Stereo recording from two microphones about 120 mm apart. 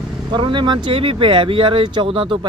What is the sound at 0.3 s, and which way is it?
Speech, 40° right (ahead or behind).